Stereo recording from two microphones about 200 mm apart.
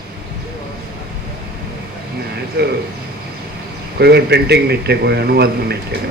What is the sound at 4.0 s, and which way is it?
Speech, 55° right (ahead or behind).